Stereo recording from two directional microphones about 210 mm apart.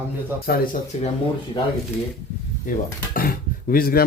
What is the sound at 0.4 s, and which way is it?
Speech, 45° left (ahead or behind).